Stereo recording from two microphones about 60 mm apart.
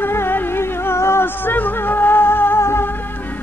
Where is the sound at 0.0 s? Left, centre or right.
Left.